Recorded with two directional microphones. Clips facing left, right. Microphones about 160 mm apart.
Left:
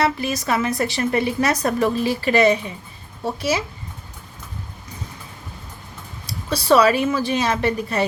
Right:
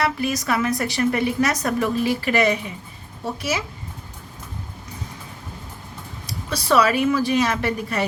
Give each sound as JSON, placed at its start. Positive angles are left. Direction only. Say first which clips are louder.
{"t": 0.0, "sound": "speech", "louder": "left 2 dB", "side_deg": 25}
{"t": 6.2, "sound": "speech", "louder": "left 4 dB", "side_deg": 30}